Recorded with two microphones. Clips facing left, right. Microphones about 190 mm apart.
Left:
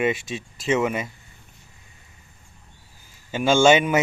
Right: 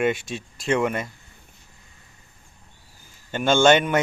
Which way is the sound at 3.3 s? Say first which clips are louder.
Left 1 dB; 5° left (ahead or behind).